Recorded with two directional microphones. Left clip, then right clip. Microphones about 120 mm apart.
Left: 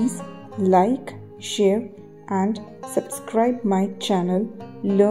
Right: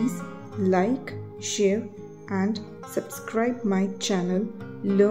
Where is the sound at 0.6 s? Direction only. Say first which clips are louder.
Left 6 dB; 15° left (ahead or behind).